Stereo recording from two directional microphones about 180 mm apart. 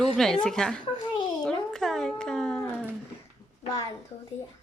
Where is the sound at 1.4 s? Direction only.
5° left (ahead or behind).